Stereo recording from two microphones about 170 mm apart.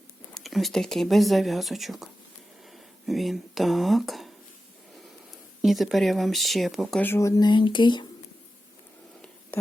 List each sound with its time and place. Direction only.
0.3 s speech: centre (ahead or behind)
5.6 s speech: centre (ahead or behind)
7.0 s speech: 15° left (ahead or behind)